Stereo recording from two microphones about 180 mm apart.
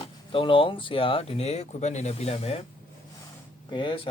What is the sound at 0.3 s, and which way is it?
Speech, 30° left (ahead or behind).